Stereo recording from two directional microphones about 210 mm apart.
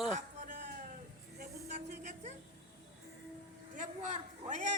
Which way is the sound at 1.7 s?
35° right (ahead or behind).